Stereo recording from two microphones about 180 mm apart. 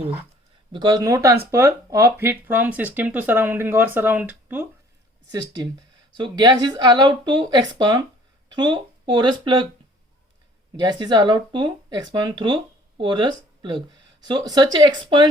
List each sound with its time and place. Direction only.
0.7 s speech: 25° right (ahead or behind)
6.1 s speech: 25° right (ahead or behind)
10.8 s speech: 25° right (ahead or behind)